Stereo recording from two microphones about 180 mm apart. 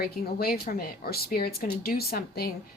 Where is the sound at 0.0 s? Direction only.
55° left (ahead or behind).